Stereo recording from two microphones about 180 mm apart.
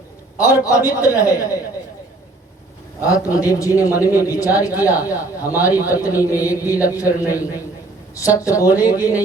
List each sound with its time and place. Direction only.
0.3 s a man's voice: 20° left (ahead or behind)
3.0 s a man's voice: 20° left (ahead or behind)